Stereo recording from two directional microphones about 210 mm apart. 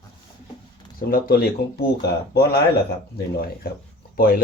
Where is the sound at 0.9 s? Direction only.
45° left (ahead or behind).